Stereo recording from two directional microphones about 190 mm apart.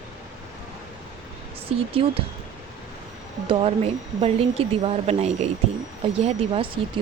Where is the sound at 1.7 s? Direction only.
30° right (ahead or behind).